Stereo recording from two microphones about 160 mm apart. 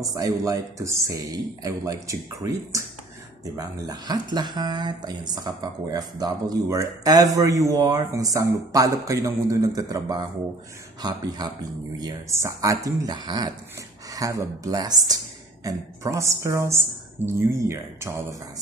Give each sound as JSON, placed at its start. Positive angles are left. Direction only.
{"t": 0.0, "sound": "a woman's voice", "side_deg": -20}